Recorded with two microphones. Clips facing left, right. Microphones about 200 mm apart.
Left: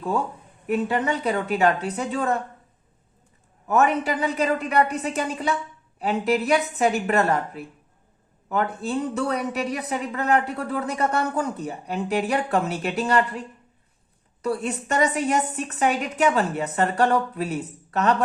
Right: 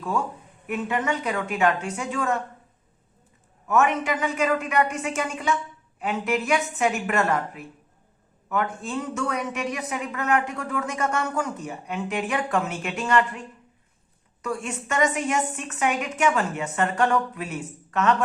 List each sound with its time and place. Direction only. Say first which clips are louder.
0.7 s a woman's voice: left 3 dB; 35° left (ahead or behind)
3.7 s a woman's voice: left 1 dB; 35° left (ahead or behind)
14.4 s a woman's voice: left 4 dB; 35° left (ahead or behind)